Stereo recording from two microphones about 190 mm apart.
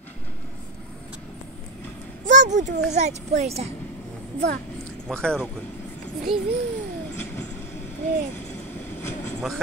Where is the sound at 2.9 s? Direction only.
35° right (ahead or behind).